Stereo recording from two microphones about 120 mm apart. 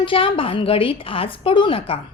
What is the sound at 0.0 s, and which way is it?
A woman's voice, 50° left (ahead or behind).